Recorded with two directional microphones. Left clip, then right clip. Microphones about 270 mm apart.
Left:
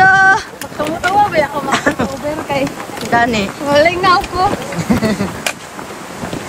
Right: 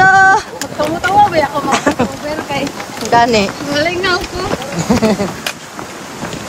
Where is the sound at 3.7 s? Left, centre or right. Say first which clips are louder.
Left 7 dB; centre.